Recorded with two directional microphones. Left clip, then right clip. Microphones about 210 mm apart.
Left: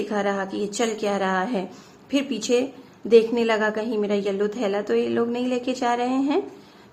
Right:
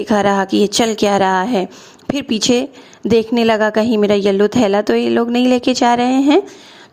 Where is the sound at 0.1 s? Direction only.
50° right (ahead or behind).